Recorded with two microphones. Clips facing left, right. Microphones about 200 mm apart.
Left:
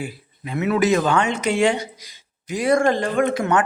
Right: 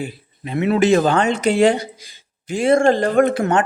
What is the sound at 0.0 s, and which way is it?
Speech, 25° right (ahead or behind).